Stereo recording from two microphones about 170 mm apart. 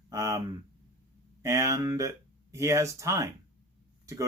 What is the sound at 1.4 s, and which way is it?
Speech, 15° right (ahead or behind).